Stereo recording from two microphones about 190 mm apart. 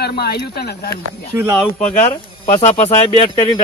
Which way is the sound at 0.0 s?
55° left (ahead or behind).